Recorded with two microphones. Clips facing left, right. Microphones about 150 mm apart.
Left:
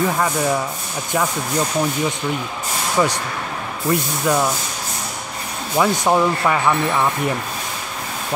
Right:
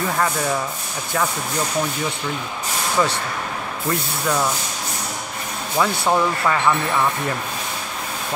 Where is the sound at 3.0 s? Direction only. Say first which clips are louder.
Left 2 dB; 15° left (ahead or behind).